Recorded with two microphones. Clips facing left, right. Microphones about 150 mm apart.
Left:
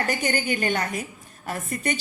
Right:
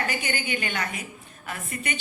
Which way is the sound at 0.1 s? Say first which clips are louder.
Left 5 dB; 40° left (ahead or behind).